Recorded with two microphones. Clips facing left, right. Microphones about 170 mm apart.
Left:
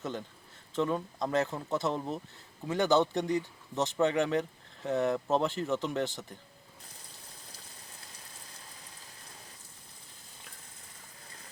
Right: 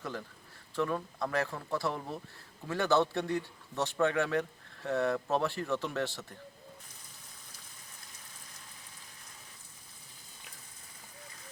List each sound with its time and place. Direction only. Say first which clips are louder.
0.8 s speech: left 2 dB; 20° left (ahead or behind)